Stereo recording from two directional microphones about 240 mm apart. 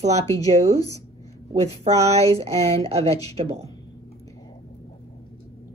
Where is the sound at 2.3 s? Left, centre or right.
Right.